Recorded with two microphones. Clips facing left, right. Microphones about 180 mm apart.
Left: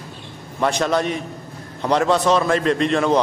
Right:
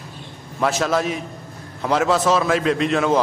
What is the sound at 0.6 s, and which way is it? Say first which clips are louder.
A man's voice: left 1 dB; centre (ahead or behind).